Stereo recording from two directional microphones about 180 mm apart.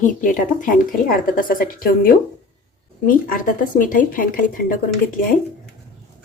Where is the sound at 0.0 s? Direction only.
45° left (ahead or behind).